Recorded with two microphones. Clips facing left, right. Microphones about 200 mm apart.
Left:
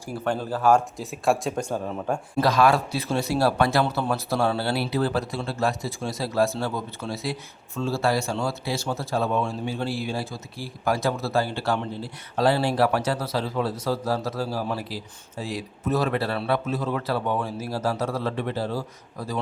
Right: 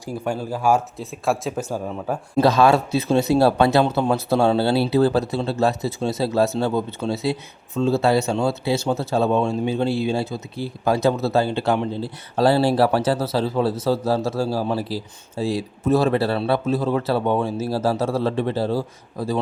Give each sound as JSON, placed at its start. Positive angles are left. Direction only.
{"t": 0.0, "sound": "speech", "side_deg": -10}
{"t": 2.3, "sound": "speech", "side_deg": -25}
{"t": 12.4, "sound": "speech", "side_deg": -35}